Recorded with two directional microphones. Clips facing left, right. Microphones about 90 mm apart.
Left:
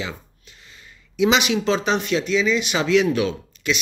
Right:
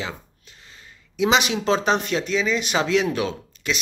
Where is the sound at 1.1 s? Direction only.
35° right (ahead or behind).